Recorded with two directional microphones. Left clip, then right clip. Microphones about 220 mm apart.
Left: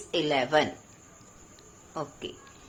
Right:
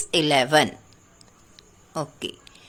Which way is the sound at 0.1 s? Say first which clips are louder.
Right 6 dB; 55° right (ahead or behind).